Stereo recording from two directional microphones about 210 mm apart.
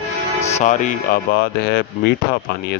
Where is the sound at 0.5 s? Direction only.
35° left (ahead or behind).